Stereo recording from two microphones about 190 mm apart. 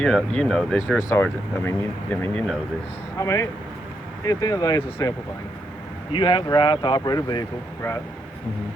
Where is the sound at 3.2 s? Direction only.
15° left (ahead or behind).